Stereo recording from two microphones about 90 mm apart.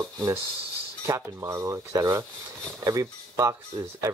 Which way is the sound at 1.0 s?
35° right (ahead or behind).